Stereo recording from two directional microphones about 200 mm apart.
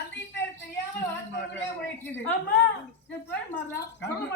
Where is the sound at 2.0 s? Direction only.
10° left (ahead or behind).